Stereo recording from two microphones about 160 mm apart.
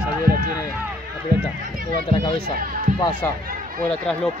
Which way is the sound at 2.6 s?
60° right (ahead or behind).